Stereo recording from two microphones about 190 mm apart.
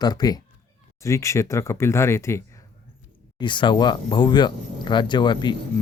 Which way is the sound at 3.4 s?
25° left (ahead or behind).